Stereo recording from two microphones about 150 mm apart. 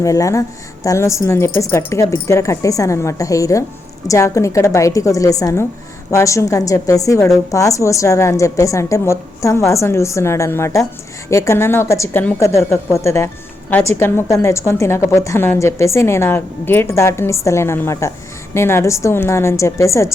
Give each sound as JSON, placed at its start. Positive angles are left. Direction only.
{"t": 0.0, "sound": "a woman's voice", "side_deg": 20}